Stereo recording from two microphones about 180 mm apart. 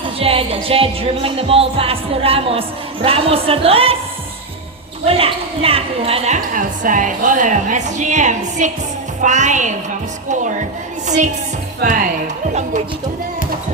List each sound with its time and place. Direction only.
0.2 s music: 30° right (ahead or behind)
5.0 s speech: 30° right (ahead or behind)
11.8 s speech: 50° right (ahead or behind)